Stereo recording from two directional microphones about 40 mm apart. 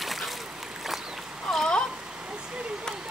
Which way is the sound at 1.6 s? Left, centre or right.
Left.